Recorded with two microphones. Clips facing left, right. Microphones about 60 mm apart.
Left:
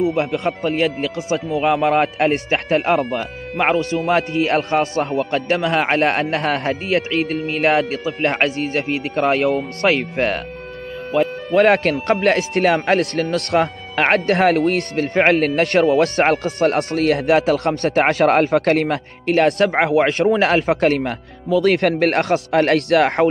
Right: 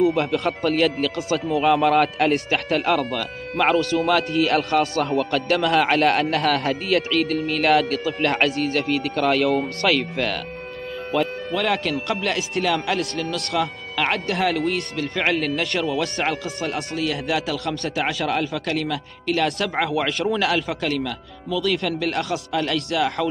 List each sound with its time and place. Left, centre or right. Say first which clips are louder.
0.0 s speech: left 1 dB; centre
0.7 s speech: right 1 dB; left
11.5 s speech: left 9 dB; left